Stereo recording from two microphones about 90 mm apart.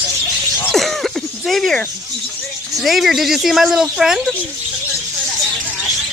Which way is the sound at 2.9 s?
Centre (ahead or behind).